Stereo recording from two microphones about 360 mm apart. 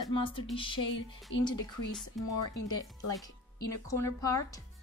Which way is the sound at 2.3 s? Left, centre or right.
Left.